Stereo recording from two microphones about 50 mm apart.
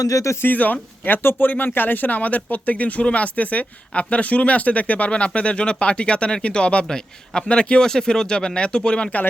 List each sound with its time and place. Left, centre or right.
0.2 s speech: left
0.4 s speech: left